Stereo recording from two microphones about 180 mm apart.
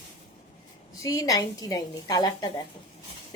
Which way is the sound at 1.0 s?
20° left (ahead or behind).